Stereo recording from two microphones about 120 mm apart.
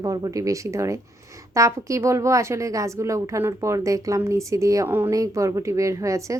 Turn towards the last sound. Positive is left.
turn(degrees=-25)  # may be behind; listen again after turning